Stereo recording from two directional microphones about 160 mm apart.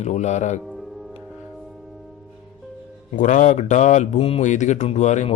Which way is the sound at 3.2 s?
55° left (ahead or behind).